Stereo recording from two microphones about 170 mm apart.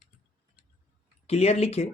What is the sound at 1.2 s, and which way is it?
Speech, 40° left (ahead or behind).